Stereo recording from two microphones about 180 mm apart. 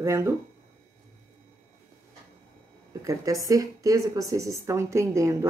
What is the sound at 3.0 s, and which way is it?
A woman's voice, 20° right (ahead or behind).